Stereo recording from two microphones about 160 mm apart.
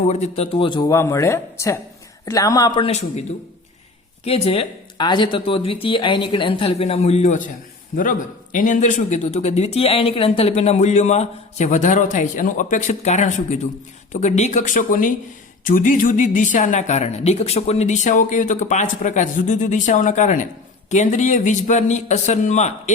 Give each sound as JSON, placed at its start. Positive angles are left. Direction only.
{"t": 0.1, "sound": "speech", "side_deg": 45}
{"t": 0.5, "sound": "speech", "side_deg": 30}
{"t": 0.9, "sound": "speech", "side_deg": 20}
{"t": 2.8, "sound": "speech", "side_deg": 40}
{"t": 8.5, "sound": "speech", "side_deg": 55}